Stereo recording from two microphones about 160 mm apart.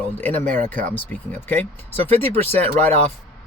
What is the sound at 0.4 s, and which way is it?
Speech, 50° right (ahead or behind).